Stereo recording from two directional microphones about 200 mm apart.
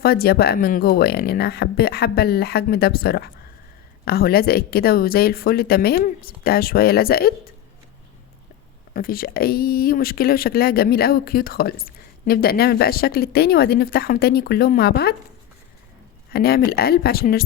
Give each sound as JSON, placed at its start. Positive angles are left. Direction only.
{"t": 0.0, "sound": "speech", "side_deg": 50}
{"t": 8.9, "sound": "speech", "side_deg": 45}
{"t": 16.3, "sound": "speech", "side_deg": 50}